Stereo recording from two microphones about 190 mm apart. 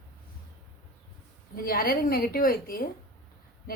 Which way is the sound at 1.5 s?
50° left (ahead or behind).